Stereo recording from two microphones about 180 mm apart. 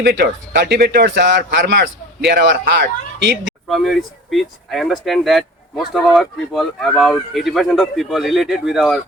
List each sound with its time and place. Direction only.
0.0 s a man's voice: 70° right (ahead or behind)
1.5 s a man's voice: 60° right (ahead or behind)
3.7 s speech: centre (ahead or behind)